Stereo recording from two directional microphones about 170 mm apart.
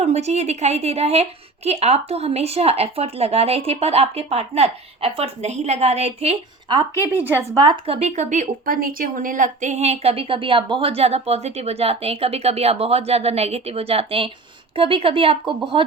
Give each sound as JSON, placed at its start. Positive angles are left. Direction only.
{"t": 0.0, "sound": "a woman's voice", "side_deg": -40}
{"t": 6.7, "sound": "a woman's voice", "side_deg": -15}
{"t": 7.6, "sound": "a woman's voice", "side_deg": -30}